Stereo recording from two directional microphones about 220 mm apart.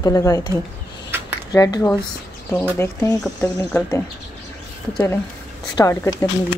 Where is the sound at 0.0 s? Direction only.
15° left (ahead or behind).